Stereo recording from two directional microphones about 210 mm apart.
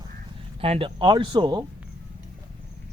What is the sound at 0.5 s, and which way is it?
Speech, 25° right (ahead or behind).